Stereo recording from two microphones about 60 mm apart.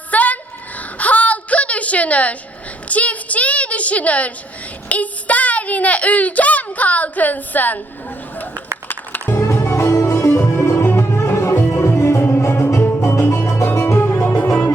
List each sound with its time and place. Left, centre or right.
0.1 s a sound: left
4.9 s a child's voice: left
8.9 s music: left
9.4 s music: left